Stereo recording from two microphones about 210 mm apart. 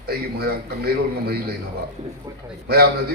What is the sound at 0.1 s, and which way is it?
A man's voice, 50° right (ahead or behind).